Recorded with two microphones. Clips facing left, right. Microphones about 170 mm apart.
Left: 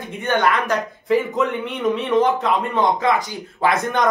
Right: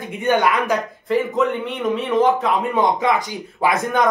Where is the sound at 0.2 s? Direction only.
10° right (ahead or behind).